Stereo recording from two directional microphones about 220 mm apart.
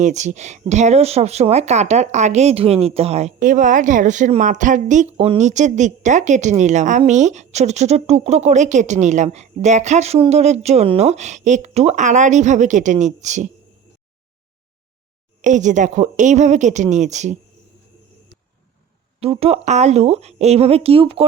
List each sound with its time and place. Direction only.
0.0 s speech: 35° right (ahead or behind)
15.4 s speech: 35° right (ahead or behind)
19.2 s speech: 25° right (ahead or behind)